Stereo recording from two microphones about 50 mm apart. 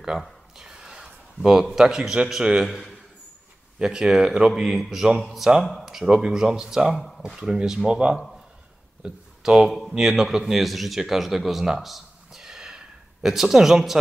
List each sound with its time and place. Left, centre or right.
0.6 s a sound: centre
1.8 s speech: centre
3.8 s speech: centre
7.0 s speech: centre
7.5 s speech: centre
9.4 s speech: centre
9.7 s speech: centre
9.9 s speech: centre